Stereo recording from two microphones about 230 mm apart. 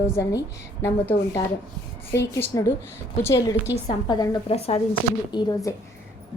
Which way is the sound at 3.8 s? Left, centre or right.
Centre.